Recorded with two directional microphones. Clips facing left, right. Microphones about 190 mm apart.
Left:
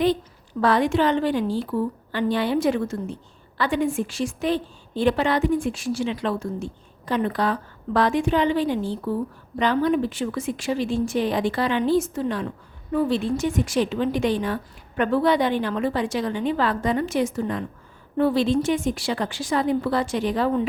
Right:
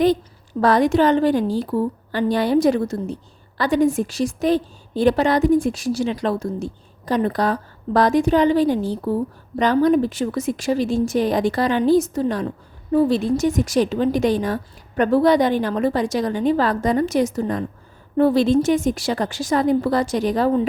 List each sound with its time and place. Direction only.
0.6 s a woman's voice: 40° right (ahead or behind)